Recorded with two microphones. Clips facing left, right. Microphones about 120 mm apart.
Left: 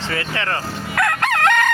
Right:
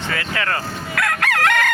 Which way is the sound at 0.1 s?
30° left (ahead or behind).